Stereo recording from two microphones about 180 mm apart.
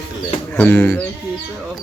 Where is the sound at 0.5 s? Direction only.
10° left (ahead or behind).